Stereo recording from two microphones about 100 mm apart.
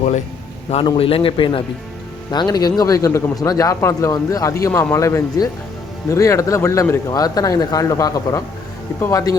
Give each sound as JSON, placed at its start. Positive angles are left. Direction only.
{"t": 0.9, "sound": "speech", "side_deg": 65}
{"t": 2.3, "sound": "speech", "side_deg": 45}
{"t": 3.3, "sound": "speech", "side_deg": 40}
{"t": 7.1, "sound": "speech", "side_deg": 40}